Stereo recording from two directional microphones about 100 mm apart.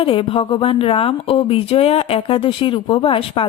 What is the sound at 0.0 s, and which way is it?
Speech, 65° left (ahead or behind).